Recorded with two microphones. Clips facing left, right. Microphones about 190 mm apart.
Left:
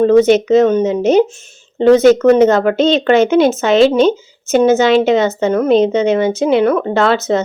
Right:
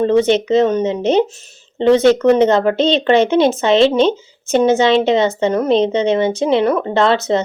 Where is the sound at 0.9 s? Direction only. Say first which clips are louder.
Left 3 dB; 30° right (ahead or behind).